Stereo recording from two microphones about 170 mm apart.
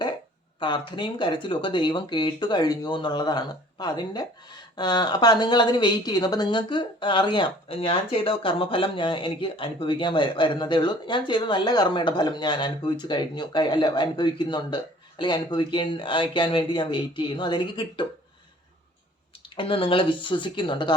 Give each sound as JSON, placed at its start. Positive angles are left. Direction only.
{"t": 0.6, "sound": "a woman's voice", "side_deg": 30}
{"t": 19.5, "sound": "a woman's voice", "side_deg": 30}